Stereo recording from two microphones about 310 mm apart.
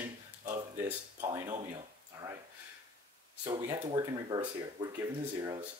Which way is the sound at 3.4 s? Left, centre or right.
Centre.